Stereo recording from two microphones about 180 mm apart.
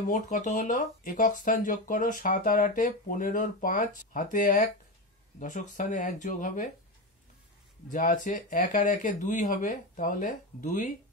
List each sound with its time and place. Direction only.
0.1 s speech: 45° left (ahead or behind)
7.9 s speech: 45° left (ahead or behind)